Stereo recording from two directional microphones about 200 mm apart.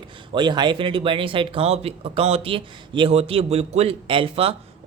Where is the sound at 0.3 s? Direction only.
20° right (ahead or behind).